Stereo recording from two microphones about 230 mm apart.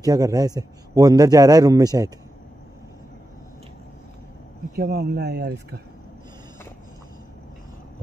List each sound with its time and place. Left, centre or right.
0.0 s speech: centre
4.7 s speech: right